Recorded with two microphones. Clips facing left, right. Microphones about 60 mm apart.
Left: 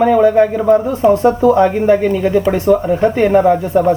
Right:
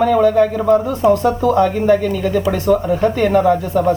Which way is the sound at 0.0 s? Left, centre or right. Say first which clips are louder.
Left 2 dB; left.